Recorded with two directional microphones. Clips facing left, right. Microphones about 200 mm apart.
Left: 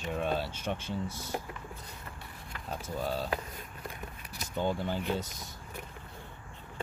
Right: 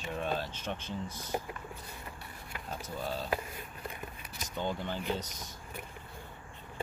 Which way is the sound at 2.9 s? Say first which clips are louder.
Left 4 dB; 10° left (ahead or behind).